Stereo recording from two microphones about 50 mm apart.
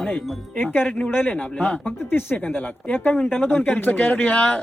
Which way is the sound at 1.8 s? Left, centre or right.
Left.